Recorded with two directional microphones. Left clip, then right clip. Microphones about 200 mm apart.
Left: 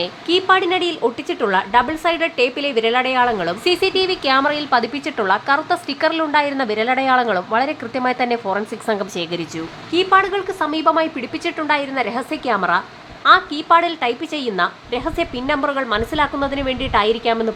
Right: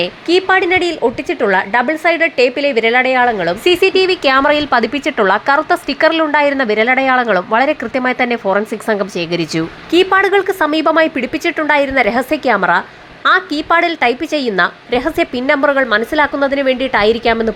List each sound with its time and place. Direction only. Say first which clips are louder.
0.0 s speech: right 5 dB; 15° right (ahead or behind)